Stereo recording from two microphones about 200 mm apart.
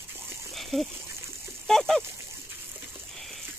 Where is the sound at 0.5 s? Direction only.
Centre (ahead or behind).